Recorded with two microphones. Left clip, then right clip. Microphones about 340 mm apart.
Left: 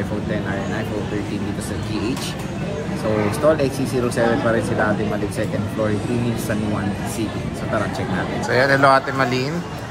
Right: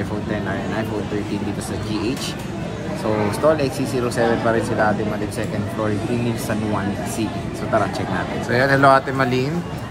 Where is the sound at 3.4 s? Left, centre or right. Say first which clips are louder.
Even; centre.